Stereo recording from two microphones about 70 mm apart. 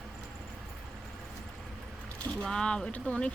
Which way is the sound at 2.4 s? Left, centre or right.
Centre.